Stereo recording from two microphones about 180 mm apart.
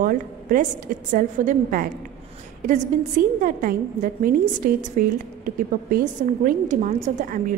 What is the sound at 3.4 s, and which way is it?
A woman's voice, 50° right (ahead or behind).